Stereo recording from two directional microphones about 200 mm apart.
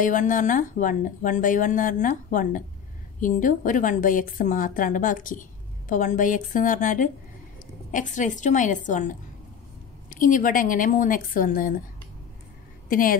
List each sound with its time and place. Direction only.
0.0 s speech: 40° left (ahead or behind)